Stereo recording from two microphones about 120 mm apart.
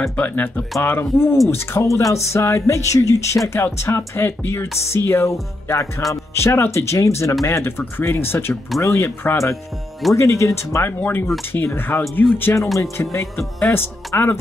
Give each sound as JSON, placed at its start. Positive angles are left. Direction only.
{"t": 0.0, "sound": "speech", "side_deg": 15}
{"t": 12.6, "sound": "speech", "side_deg": 0}
{"t": 12.9, "sound": "speech", "side_deg": 20}
{"t": 13.4, "sound": "speech", "side_deg": 5}
{"t": 13.7, "sound": "speech", "side_deg": 20}